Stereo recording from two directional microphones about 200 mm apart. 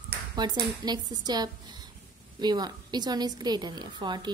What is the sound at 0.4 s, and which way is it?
A woman's voice, 20° right (ahead or behind).